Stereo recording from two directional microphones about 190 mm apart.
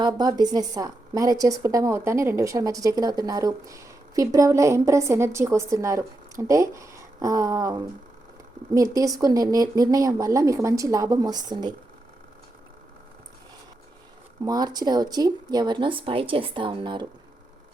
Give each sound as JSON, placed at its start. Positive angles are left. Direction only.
{"t": 0.0, "sound": "a woman's voice", "side_deg": -20}
{"t": 14.4, "sound": "speech", "side_deg": -20}